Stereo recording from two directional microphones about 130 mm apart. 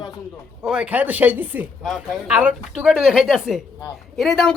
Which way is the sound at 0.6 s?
5° right (ahead or behind).